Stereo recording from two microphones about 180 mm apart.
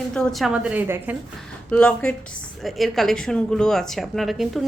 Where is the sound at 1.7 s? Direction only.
5° left (ahead or behind).